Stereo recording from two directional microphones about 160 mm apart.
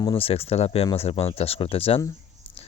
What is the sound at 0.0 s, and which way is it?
Speech, 35° left (ahead or behind).